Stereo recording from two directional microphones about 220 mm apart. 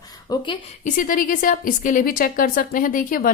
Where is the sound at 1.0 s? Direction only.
40° left (ahead or behind).